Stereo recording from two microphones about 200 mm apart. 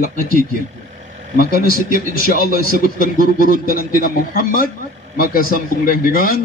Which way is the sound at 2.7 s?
45° left (ahead or behind).